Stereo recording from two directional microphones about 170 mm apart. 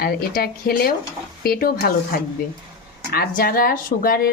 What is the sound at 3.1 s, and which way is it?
Speech, 60° left (ahead or behind).